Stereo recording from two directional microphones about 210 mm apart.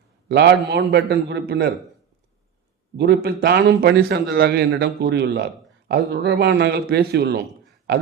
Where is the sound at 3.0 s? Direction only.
50° right (ahead or behind).